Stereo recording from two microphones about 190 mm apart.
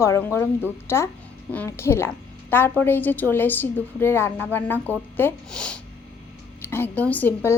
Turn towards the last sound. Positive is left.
turn(degrees=10)  # may be behind; listen again after turning